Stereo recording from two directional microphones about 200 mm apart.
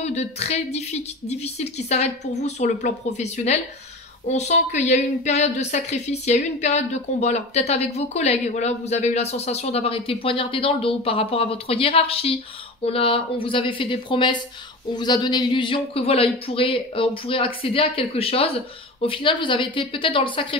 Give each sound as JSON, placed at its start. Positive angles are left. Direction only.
{"t": 0.0, "sound": "a woman's voice", "side_deg": 35}